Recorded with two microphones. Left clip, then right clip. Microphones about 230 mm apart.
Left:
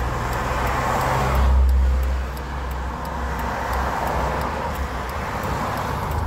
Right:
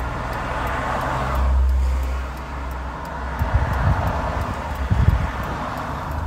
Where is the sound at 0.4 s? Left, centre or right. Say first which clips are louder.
Left 2 dB; left.